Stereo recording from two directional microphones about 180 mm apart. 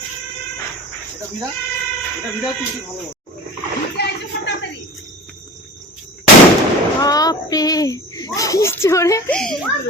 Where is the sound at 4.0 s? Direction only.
65° left (ahead or behind).